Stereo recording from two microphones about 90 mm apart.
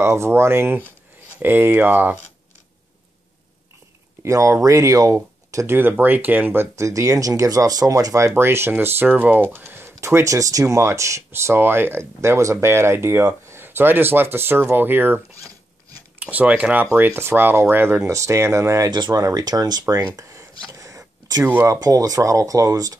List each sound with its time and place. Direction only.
0.0 s speech: 30° right (ahead or behind)
4.2 s speech: 35° right (ahead or behind)
5.8 s speech: 20° right (ahead or behind)
16.9 s speech: 25° right (ahead or behind)
18.9 s speech: 55° right (ahead or behind)
19.2 s speech: 45° right (ahead or behind)